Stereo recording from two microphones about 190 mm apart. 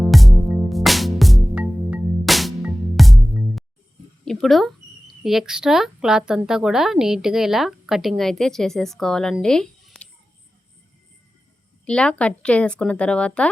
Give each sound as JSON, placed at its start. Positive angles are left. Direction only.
{"t": 0.0, "sound": "music", "side_deg": 0}
{"t": 4.3, "sound": "speech", "side_deg": 0}
{"t": 11.9, "sound": "speech", "side_deg": 5}